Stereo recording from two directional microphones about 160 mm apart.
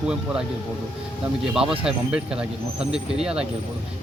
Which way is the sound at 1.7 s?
5° right (ahead or behind).